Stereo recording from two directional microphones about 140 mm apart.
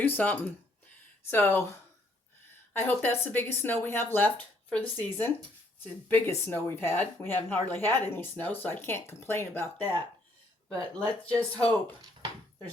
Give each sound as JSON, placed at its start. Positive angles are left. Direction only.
{"t": 0.0, "sound": "speech", "side_deg": 15}
{"t": 11.2, "sound": "speech", "side_deg": 10}